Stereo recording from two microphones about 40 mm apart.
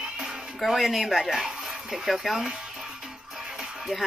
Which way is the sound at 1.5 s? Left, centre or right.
Centre.